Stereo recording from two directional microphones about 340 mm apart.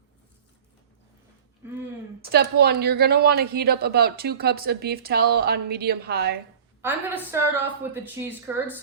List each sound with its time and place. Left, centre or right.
2.3 s speech: right
6.8 s a woman's voice: centre